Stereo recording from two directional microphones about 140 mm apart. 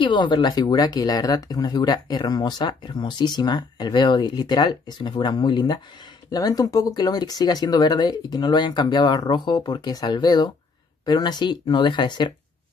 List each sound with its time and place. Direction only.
0.1 s speech: 35° left (ahead or behind)